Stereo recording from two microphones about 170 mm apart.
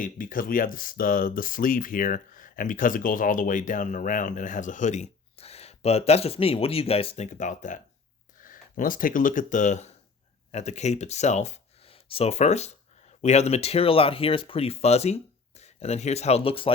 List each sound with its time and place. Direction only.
0.0 s speech: 55° left (ahead or behind); by 16.7 s 35° left (ahead or behind)